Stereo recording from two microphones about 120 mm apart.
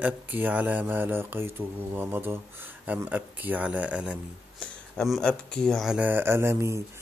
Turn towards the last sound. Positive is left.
turn(degrees=-20)  # may be behind; listen again after turning